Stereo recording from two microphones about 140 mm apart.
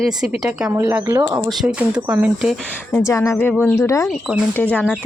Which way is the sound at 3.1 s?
20° left (ahead or behind).